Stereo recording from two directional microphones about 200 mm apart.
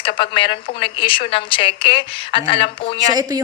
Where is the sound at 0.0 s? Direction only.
25° left (ahead or behind).